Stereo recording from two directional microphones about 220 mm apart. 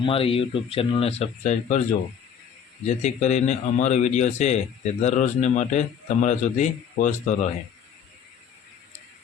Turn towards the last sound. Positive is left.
turn(degrees=35)  # may be behind; listen again after turning